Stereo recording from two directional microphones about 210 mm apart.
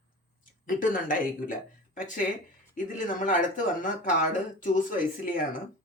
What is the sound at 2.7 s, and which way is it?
Speech, 40° left (ahead or behind).